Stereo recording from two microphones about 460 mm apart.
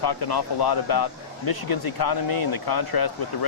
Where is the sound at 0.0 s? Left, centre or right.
Left.